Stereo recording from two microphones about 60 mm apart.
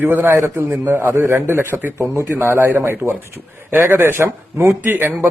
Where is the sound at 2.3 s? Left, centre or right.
Right.